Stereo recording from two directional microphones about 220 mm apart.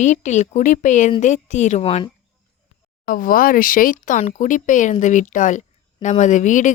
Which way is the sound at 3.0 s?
40° left (ahead or behind).